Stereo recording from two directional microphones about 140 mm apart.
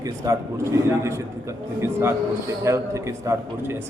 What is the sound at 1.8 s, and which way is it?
A man's voice, 20° right (ahead or behind).